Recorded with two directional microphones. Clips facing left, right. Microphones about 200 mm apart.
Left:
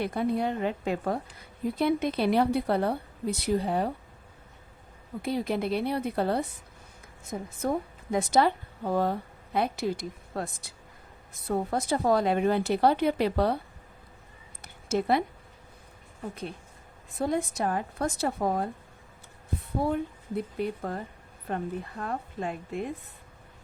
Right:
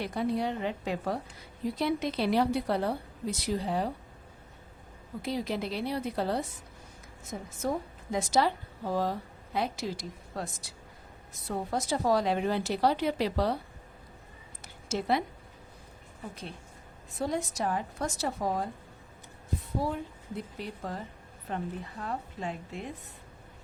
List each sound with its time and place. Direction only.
0.0 s a woman's voice: 55° left (ahead or behind)
5.2 s a woman's voice: 55° left (ahead or behind)
14.6 s a sound: 55° left (ahead or behind)
17.2 s a woman's voice: 55° left (ahead or behind)